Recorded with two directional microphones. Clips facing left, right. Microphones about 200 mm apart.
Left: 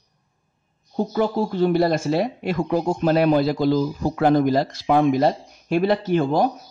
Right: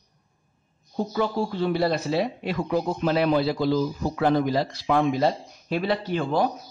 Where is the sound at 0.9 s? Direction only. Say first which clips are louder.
Left 4 dB; 50° left (ahead or behind).